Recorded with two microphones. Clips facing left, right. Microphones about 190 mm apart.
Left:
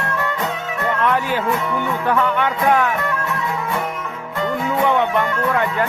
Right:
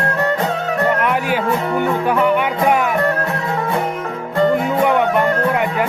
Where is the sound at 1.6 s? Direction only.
45° right (ahead or behind).